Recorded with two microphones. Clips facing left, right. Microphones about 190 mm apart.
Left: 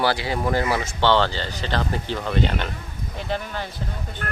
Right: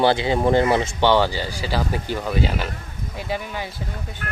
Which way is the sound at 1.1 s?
10° right (ahead or behind).